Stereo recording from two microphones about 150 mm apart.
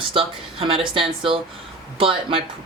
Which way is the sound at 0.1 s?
35° right (ahead or behind).